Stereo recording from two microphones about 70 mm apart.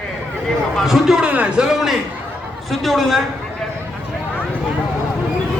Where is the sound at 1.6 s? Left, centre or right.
Centre.